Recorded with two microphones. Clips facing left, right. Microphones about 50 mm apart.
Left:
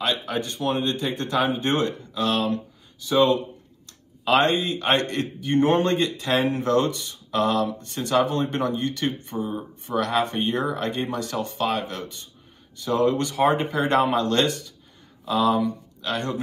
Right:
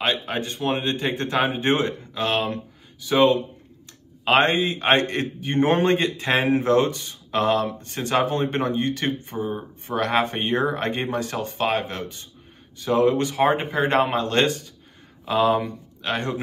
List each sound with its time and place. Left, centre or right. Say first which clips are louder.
0.0 s a man's voice: right 1 dB; right